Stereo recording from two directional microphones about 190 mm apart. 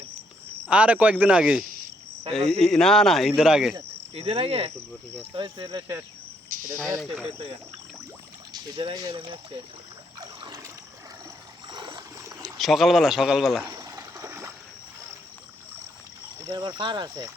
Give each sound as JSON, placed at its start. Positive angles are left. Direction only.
{"t": 0.7, "sound": "speech", "side_deg": -5}
{"t": 3.8, "sound": "cricket", "side_deg": -30}
{"t": 5.3, "sound": "speech", "side_deg": -25}
{"t": 6.5, "sound": "cricket", "side_deg": -45}
{"t": 7.3, "sound": "speech", "side_deg": -30}
{"t": 8.5, "sound": "speech", "side_deg": -20}
{"t": 10.2, "sound": "trickle", "side_deg": -20}
{"t": 11.7, "sound": "stream", "side_deg": -25}
{"t": 12.3, "sound": "speech", "side_deg": 0}
{"t": 13.7, "sound": "a sound", "side_deg": -20}
{"t": 16.5, "sound": "speech", "side_deg": -25}